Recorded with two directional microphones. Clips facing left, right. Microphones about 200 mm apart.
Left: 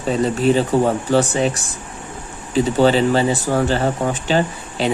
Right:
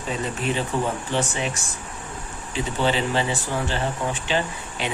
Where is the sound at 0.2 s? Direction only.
35° left (ahead or behind).